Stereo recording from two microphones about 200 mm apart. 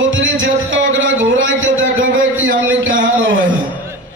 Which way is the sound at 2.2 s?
70° right (ahead or behind).